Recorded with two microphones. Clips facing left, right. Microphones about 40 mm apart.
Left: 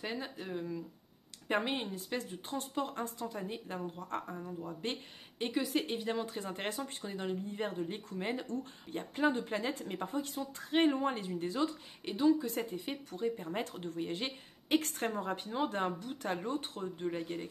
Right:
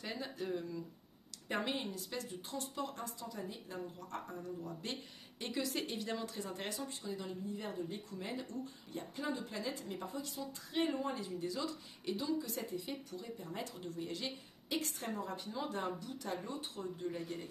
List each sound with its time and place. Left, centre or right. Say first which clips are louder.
0.0 s speech: left 2 dB; left
1.5 s speech: left 4 dB; left
5.4 s speech: left 5 dB; left